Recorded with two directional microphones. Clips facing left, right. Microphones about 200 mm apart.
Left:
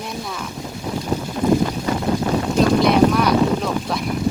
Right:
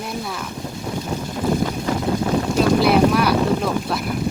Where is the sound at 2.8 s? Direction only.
5° right (ahead or behind).